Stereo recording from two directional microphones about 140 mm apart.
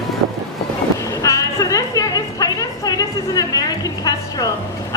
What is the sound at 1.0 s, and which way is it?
Music, 25° left (ahead or behind).